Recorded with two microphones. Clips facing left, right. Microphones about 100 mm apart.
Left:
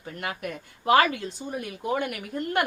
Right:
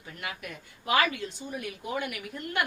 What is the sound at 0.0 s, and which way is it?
A woman's voice, 45° left (ahead or behind).